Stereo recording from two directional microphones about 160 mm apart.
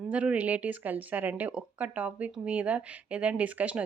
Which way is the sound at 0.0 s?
10° right (ahead or behind).